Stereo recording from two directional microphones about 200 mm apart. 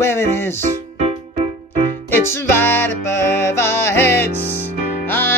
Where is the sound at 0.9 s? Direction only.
30° right (ahead or behind).